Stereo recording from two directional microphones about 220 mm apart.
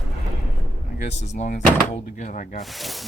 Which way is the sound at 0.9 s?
30° left (ahead or behind).